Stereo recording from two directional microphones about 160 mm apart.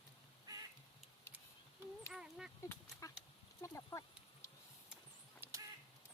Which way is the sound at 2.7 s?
20° left (ahead or behind).